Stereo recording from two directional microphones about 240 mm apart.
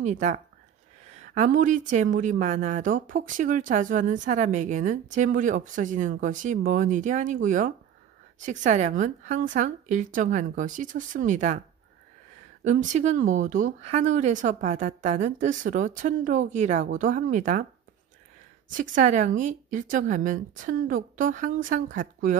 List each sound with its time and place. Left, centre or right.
0.0 s a woman's voice: right
12.6 s a woman's voice: right
18.7 s a woman's voice: right